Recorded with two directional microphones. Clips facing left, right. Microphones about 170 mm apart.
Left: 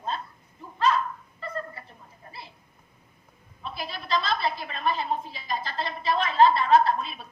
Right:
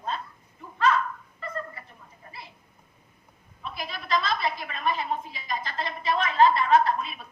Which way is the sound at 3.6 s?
30° left (ahead or behind).